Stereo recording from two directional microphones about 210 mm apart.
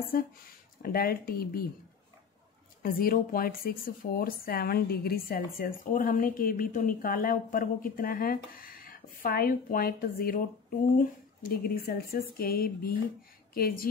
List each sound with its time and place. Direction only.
0.8 s speech: 45° left (ahead or behind)
2.8 s speech: 40° left (ahead or behind)